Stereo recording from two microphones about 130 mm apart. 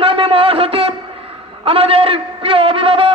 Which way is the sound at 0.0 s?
45° right (ahead or behind).